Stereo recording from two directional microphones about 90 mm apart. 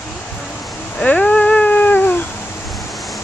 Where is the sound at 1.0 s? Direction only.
15° left (ahead or behind).